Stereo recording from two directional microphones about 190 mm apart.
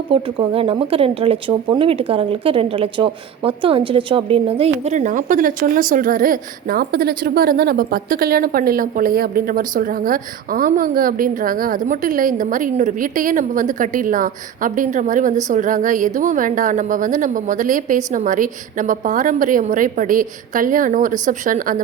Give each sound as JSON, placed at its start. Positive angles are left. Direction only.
{"t": 0.1, "sound": "speech", "side_deg": -30}